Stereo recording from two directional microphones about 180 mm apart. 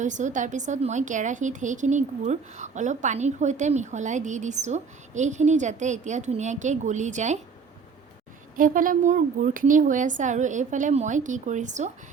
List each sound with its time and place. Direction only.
0.0 s a woman's voice: 40° right (ahead or behind)
8.5 s a woman's voice: 50° right (ahead or behind)